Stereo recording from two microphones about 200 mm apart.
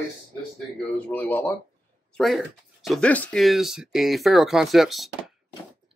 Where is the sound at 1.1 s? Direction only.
10° left (ahead or behind).